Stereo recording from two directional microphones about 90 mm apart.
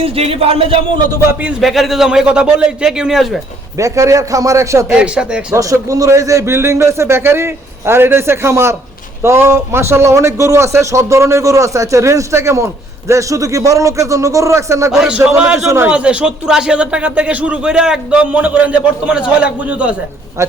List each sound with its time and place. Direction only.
0.0 s a man's voice: 90° right
1.6 s a man's voice: centre (ahead or behind)
3.8 s a man's voice: 35° right (ahead or behind)
4.9 s speech: 10° right (ahead or behind)
5.5 s a man's voice: 35° right (ahead or behind)
14.9 s speech: 10° right (ahead or behind)
15.6 s a man's voice: 35° right (ahead or behind)
15.9 s speech: 10° right (ahead or behind)
20.4 s a man's voice: 35° right (ahead or behind)